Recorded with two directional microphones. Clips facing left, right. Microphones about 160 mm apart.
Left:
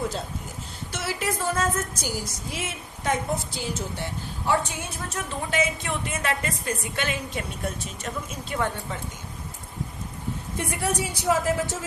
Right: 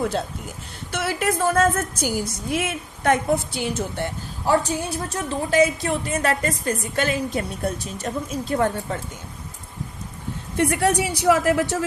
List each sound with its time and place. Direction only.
0.9 s a woman's voice: 60° right (ahead or behind)
4.4 s a woman's voice: 35° right (ahead or behind)
10.6 s speech: 70° right (ahead or behind)